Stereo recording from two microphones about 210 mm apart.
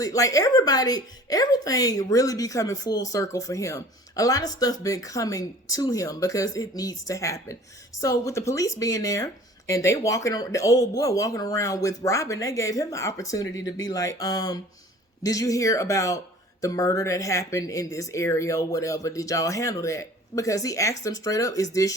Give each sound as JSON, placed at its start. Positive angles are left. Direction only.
{"t": 0.0, "sound": "speech", "side_deg": 15}